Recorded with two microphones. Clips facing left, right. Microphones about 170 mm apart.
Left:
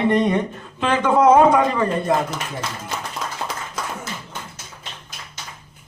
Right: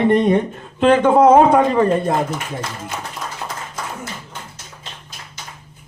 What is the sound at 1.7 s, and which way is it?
Speech, 30° right (ahead or behind).